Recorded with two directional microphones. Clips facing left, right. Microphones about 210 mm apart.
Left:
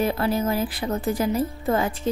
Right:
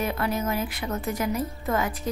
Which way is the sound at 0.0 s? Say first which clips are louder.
Left 4 dB; 30° left (ahead or behind).